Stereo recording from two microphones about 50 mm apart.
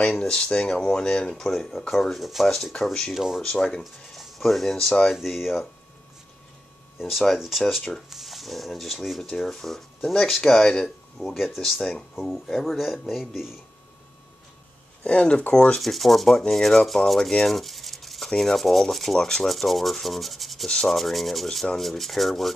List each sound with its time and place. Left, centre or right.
0.3 s speech: centre
1.3 s speech: centre
3.8 s speech: centre
7.0 s speech: centre
11.8 s speech: centre
15.0 s speech: left
15.8 s speech: centre
17.5 s a sound: centre
18.3 s speech: centre